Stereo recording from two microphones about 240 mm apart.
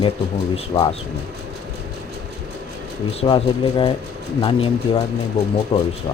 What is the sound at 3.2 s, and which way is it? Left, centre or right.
Speech, centre.